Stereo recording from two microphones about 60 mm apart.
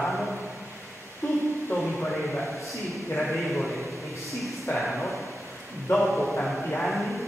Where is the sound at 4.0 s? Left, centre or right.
Left.